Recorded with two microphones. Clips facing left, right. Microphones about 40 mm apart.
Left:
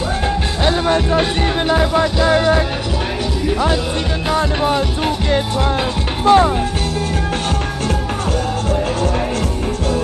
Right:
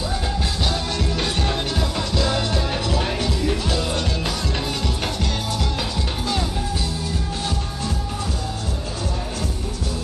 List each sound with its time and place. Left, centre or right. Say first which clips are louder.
0.7 s music: left 9 dB; left
6.2 s music: left 17 dB; left